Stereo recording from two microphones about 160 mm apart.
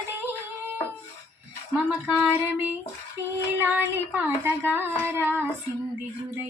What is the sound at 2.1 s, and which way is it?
Child singing, 10° right (ahead or behind).